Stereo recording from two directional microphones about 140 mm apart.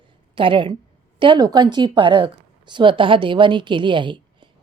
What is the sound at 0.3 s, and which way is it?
A woman's voice, 35° right (ahead or behind).